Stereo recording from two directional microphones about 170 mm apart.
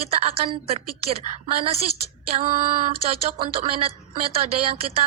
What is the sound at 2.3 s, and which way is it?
Female singing, 45° right (ahead or behind).